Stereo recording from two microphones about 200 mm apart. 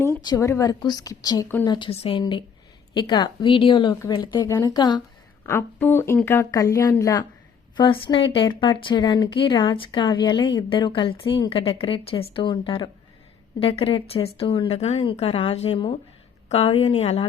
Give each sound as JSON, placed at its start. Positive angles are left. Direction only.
{"t": 0.3, "sound": "speech", "side_deg": 15}
{"t": 1.7, "sound": "speech", "side_deg": 25}